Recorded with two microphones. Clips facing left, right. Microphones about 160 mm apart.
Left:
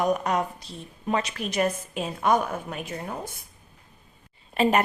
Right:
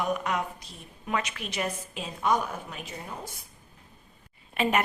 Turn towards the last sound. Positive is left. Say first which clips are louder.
# left 4 dB
turn(degrees=35)  # may be behind; listen again after turning